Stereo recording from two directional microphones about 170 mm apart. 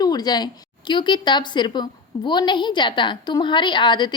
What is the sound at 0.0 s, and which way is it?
A woman's voice, 25° left (ahead or behind).